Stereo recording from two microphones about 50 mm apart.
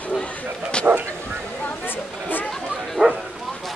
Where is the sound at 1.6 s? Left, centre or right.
Left.